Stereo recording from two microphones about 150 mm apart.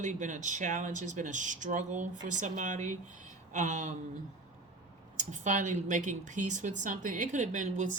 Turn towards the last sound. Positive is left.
turn(degrees=-55)  # may be behind; listen again after turning